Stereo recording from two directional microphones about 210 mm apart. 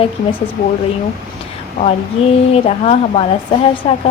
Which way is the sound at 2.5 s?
30° left (ahead or behind).